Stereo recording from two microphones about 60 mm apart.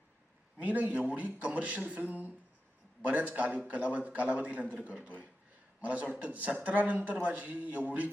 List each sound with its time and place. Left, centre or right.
0.6 s a man's voice: right